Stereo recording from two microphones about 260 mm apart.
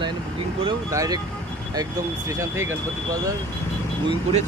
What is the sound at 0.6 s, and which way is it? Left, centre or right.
Speech, centre.